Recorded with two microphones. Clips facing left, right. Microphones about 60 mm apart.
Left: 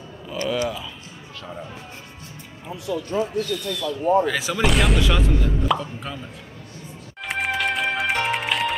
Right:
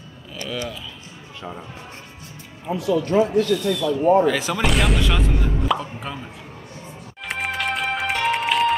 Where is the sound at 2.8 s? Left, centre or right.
Right.